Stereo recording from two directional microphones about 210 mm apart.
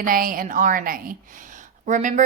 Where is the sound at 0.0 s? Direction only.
40° right (ahead or behind).